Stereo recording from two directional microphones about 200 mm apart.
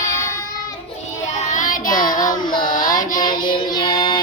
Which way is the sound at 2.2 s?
20° left (ahead or behind).